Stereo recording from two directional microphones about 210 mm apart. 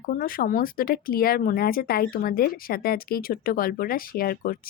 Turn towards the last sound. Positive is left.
turn(degrees=45)  # may be behind; listen again after turning